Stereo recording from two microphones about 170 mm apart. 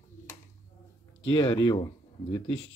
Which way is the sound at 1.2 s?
30° left (ahead or behind).